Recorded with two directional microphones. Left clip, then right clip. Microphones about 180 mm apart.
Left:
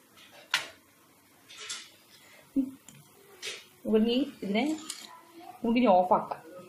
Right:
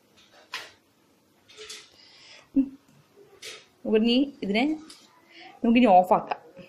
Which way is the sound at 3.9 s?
20° right (ahead or behind).